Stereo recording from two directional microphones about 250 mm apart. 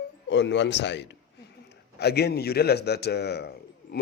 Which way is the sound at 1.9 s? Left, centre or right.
Left.